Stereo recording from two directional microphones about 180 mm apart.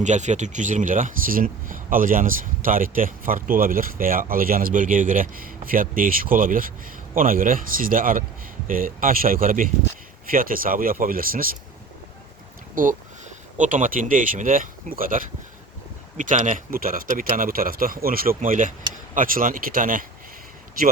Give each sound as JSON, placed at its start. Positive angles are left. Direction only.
{"t": 0.0, "sound": "speech", "side_deg": -40}
{"t": 12.7, "sound": "speech", "side_deg": -50}